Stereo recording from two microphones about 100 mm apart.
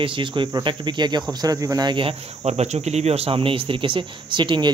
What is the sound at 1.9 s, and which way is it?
Speech, 75° right (ahead or behind).